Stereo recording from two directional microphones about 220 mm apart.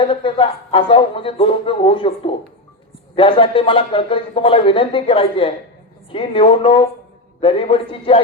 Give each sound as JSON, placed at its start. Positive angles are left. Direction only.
{"t": 0.0, "sound": "speech", "side_deg": 25}